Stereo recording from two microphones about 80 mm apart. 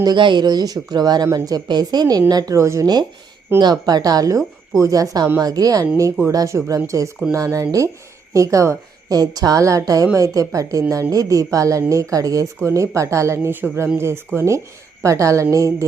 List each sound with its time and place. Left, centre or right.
0.0 s speech: right
2.6 s speech: right
2.8 s a woman's voice: right
9.1 s a woman's voice: right
13.6 s speech: right
14.3 s speech: right